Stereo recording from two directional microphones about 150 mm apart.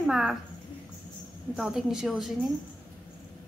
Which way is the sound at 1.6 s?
Centre (ahead or behind).